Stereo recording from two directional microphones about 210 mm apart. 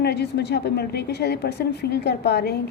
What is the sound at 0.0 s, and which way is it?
A woman's voice, 50° left (ahead or behind).